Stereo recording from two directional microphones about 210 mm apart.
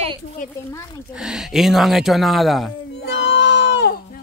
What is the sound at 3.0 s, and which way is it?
Crowd, 55° left (ahead or behind).